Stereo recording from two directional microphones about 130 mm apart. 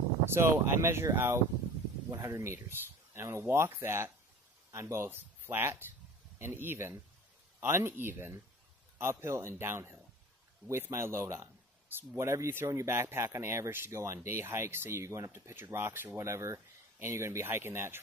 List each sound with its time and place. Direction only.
0.2 s speech: 20° right (ahead or behind)